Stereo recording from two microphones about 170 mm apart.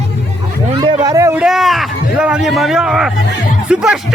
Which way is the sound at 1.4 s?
Centre (ahead or behind).